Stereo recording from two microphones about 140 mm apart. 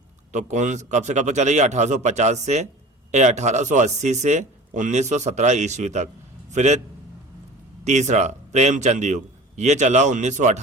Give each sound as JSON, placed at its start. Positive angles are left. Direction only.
{"t": 0.3, "sound": "a man's voice", "side_deg": -60}
{"t": 7.9, "sound": "a man's voice", "side_deg": -55}